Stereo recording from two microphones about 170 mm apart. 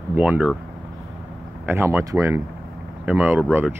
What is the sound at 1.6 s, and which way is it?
Speech, 15° right (ahead or behind).